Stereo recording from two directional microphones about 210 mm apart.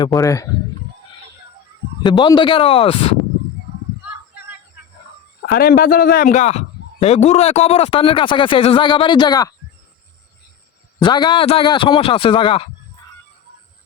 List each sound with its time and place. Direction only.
0.0 s speech: 15° left (ahead or behind)
2.0 s a man's voice: 20° left (ahead or behind)
5.5 s a man's voice: 45° left (ahead or behind); by 9.5 s 20° left (ahead or behind)
11.0 s a man's voice: 20° left (ahead or behind)